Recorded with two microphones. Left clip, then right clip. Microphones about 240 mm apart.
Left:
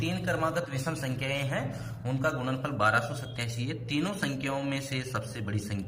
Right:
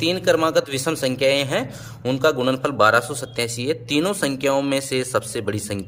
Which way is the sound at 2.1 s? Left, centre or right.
Right.